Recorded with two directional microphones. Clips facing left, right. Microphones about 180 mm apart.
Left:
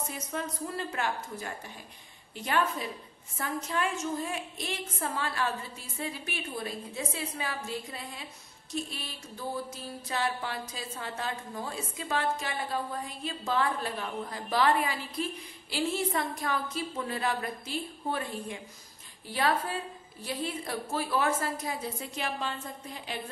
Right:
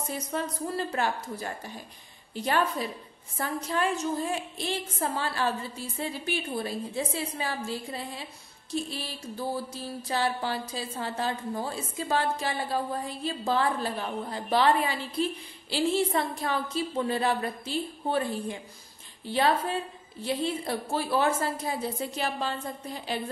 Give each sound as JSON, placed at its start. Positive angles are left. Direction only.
{"t": 0.3, "sound": "a woman's voice", "side_deg": -35}
{"t": 9.8, "sound": "a woman's voice", "side_deg": -30}